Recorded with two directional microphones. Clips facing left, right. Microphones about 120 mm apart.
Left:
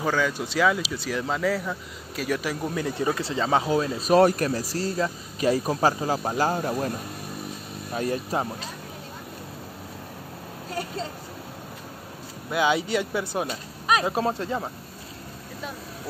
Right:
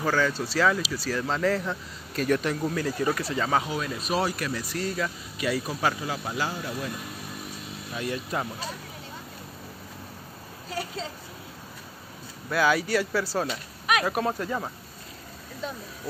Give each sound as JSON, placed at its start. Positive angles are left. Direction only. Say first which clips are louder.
{"t": 0.0, "sound": "speech", "louder": "even", "side_deg": 15}
{"t": 4.1, "sound": "speech", "louder": "left 9 dB", "side_deg": 50}
{"t": 7.9, "sound": "speech", "louder": "left 4 dB", "side_deg": 40}
{"t": 10.7, "sound": "speech", "louder": "left 2 dB", "side_deg": 50}
{"t": 12.4, "sound": "speech", "louder": "left 1 dB", "side_deg": 20}
{"t": 13.5, "sound": "speech", "louder": "left 3 dB", "side_deg": 30}